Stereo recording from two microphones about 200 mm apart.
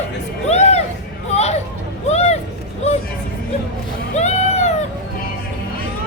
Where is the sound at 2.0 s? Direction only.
35° left (ahead or behind).